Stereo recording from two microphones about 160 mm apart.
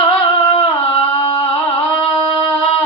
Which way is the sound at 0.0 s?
30° left (ahead or behind).